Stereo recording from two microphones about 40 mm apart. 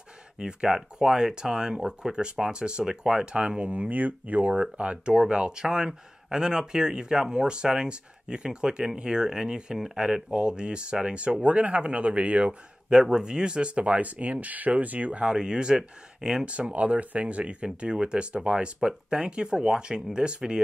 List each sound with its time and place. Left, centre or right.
0.4 s speech: right
4.6 s speech: right
12.9 s speech: centre; by 15.3 s right
15.3 s speech: right
16.4 s speech: right